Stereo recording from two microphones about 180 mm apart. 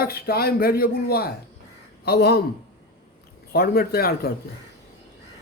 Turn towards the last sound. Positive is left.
turn(degrees=60)  # may be behind; listen again after turning